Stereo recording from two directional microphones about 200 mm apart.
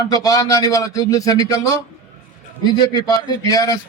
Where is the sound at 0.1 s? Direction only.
15° left (ahead or behind).